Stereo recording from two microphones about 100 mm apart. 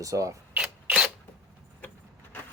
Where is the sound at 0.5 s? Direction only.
15° right (ahead or behind).